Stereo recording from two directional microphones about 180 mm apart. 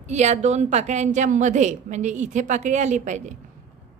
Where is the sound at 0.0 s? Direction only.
40° right (ahead or behind).